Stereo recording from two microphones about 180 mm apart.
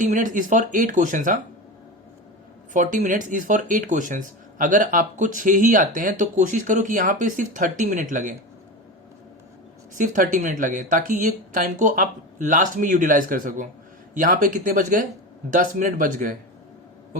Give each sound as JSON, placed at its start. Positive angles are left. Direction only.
{"t": 0.0, "sound": "speech", "side_deg": -45}
{"t": 2.7, "sound": "speech", "side_deg": -45}
{"t": 9.9, "sound": "speech", "side_deg": -45}